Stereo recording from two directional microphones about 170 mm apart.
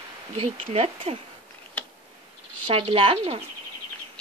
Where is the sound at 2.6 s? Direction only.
35° right (ahead or behind).